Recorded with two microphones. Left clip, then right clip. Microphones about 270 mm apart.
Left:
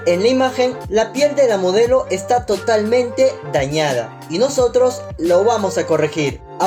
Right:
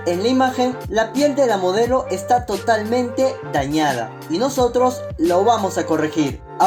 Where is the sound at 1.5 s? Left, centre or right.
Right.